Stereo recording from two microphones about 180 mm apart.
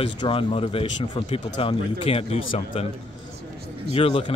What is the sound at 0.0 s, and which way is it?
Speech, 30° left (ahead or behind).